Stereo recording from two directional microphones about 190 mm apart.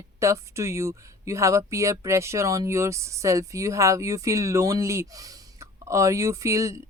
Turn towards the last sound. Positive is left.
turn(degrees=-15)  # may be behind; listen again after turning